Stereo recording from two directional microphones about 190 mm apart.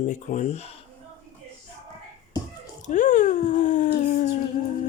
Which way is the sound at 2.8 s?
40° left (ahead or behind).